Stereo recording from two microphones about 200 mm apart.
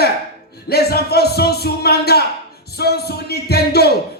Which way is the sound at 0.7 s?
50° left (ahead or behind).